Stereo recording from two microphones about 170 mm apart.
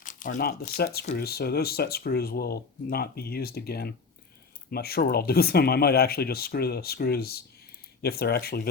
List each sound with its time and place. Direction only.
0.0 s crumpling: 50° left (ahead or behind)
1.1 s speech: 65° left (ahead or behind)